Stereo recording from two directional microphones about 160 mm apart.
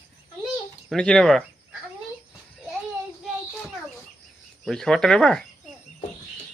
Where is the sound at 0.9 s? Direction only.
5° left (ahead or behind).